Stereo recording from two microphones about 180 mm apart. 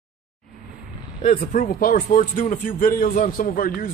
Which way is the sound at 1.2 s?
45° left (ahead or behind).